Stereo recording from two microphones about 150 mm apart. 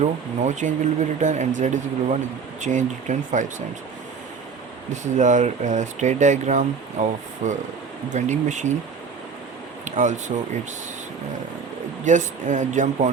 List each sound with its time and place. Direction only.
0.0 s speech: 55° right (ahead or behind)
4.9 s speech: 55° right (ahead or behind)
9.8 s speech: 55° right (ahead or behind)
12.0 s speech: 55° right (ahead or behind)